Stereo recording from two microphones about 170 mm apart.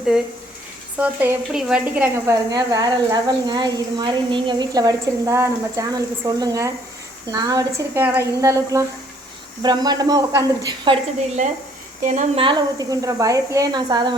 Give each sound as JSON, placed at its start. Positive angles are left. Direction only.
{"t": 0.9, "sound": "a woman's voice", "side_deg": -10}
{"t": 12.0, "sound": "a woman's voice", "side_deg": -45}
{"t": 12.4, "sound": "a woman's voice", "side_deg": -25}